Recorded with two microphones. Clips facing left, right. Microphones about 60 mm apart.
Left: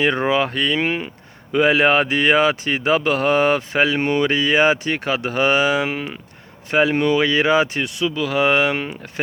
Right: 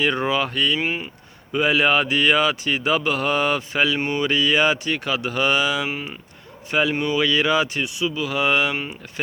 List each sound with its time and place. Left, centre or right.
0.0 s speech: left
5.9 s speech: left
7.9 s speech: left